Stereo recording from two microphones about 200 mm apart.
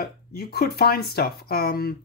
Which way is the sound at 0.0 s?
50° left (ahead or behind).